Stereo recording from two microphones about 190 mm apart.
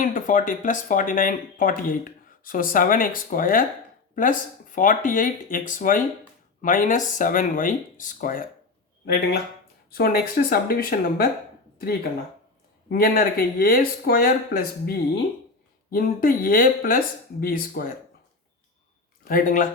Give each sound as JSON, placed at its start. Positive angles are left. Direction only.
{"t": 0.0, "sound": "speech", "side_deg": 45}
{"t": 9.9, "sound": "speech", "side_deg": 50}
{"t": 12.9, "sound": "speech", "side_deg": 50}
{"t": 19.2, "sound": "speech", "side_deg": 45}